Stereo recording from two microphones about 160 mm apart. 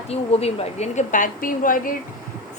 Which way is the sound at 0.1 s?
40° left (ahead or behind).